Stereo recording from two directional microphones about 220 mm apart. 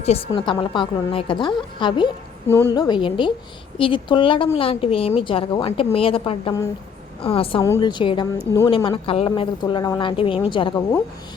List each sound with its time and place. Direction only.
0.0 s a woman's voice: 25° left (ahead or behind)